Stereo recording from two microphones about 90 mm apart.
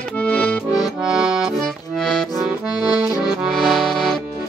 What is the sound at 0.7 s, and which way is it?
Accordion, 5° right (ahead or behind).